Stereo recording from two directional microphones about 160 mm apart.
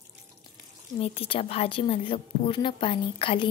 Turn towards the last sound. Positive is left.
turn(degrees=30)  # may be behind; listen again after turning